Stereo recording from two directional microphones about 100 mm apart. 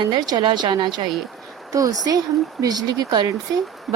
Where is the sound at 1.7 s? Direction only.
35° right (ahead or behind).